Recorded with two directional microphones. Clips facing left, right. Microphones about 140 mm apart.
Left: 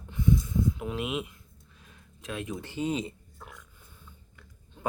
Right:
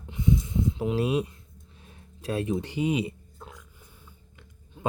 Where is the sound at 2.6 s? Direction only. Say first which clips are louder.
Right 4 dB; 15° right (ahead or behind).